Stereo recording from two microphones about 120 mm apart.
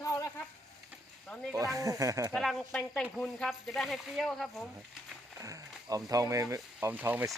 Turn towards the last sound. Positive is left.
turn(degrees=-15)  # may be behind; listen again after turning